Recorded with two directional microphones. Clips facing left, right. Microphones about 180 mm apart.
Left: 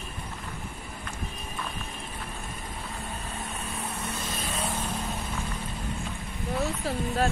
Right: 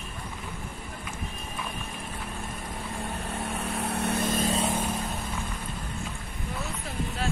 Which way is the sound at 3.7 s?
65° right (ahead or behind).